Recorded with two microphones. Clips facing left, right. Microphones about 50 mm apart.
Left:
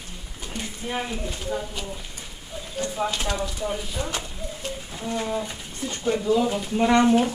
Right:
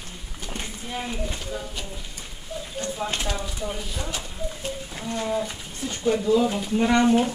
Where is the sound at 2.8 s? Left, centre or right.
Centre.